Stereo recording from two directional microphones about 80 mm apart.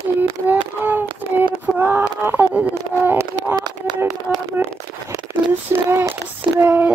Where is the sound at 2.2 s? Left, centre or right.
Right.